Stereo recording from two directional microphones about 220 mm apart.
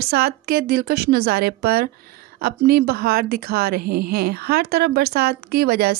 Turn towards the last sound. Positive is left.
turn(degrees=-45)  # may be behind; listen again after turning